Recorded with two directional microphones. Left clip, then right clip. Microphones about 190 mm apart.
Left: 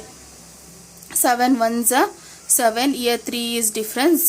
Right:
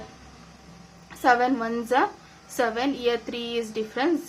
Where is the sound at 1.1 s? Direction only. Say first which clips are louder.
Left 3 dB; 40° left (ahead or behind).